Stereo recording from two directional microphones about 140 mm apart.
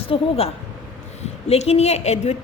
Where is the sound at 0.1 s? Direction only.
45° left (ahead or behind).